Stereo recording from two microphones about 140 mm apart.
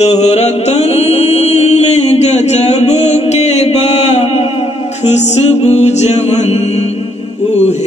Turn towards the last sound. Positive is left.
turn(degrees=55)  # may be behind; listen again after turning